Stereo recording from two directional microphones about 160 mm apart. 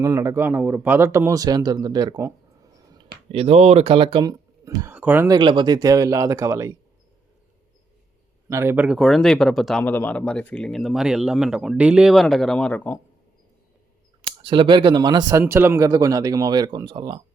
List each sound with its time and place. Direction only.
0.0 s speech: 15° right (ahead or behind)
3.3 s speech: 40° right (ahead or behind); by 5.3 s 10° right (ahead or behind)
5.3 s speech: 30° right (ahead or behind)
8.4 s speech: 15° right (ahead or behind)
9.0 s speech: centre (ahead or behind)
14.2 s speech: 30° right (ahead or behind)